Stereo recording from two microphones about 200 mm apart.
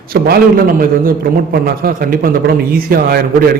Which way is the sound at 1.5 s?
45° right (ahead or behind).